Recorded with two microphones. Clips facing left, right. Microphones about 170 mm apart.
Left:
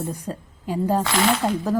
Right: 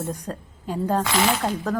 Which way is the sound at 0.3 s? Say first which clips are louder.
Left 2 dB; 5° left (ahead or behind).